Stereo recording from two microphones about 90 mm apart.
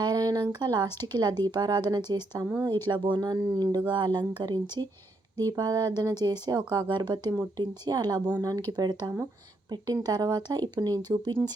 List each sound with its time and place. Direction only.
0.0 s a sound: 45° right (ahead or behind)
0.6 s speech: 50° right (ahead or behind)
4.6 s speech: 25° left (ahead or behind)
5.4 s speech: 45° right (ahead or behind)